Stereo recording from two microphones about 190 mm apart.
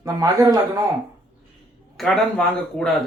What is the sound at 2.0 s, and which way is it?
Speech, centre (ahead or behind).